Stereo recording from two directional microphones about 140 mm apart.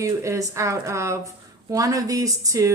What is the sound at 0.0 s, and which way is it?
A woman's voice, 20° right (ahead or behind).